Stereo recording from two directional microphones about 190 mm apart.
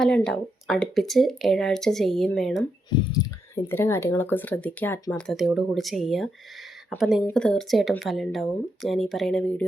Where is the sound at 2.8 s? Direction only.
20° left (ahead or behind).